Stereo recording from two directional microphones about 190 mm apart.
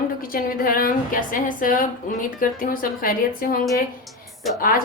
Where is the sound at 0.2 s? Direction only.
50° left (ahead or behind).